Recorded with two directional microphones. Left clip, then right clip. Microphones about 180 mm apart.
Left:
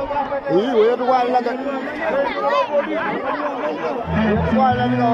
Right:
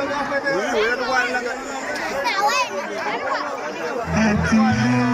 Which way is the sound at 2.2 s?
80° right.